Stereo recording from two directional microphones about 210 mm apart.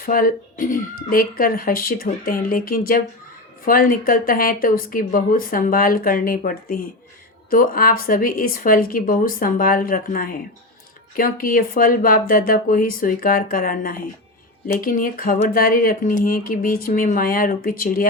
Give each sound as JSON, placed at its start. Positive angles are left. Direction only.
{"t": 0.0, "sound": "speech", "side_deg": 40}